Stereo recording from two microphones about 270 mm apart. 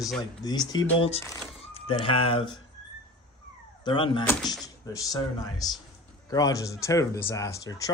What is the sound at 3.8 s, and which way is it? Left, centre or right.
Speech, centre.